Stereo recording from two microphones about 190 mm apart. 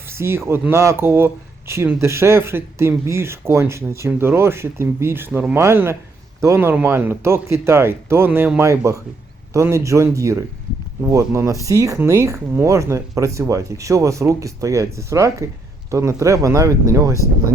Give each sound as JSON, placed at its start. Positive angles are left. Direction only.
{"t": 0.1, "sound": "speech", "side_deg": -15}